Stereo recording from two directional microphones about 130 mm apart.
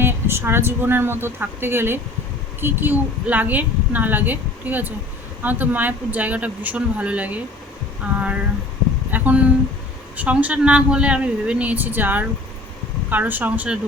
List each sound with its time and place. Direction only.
0.0 s a woman's voice: 20° right (ahead or behind)